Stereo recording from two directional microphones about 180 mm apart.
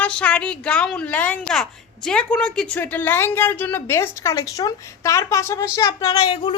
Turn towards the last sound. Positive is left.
turn(degrees=25)  # may be behind; listen again after turning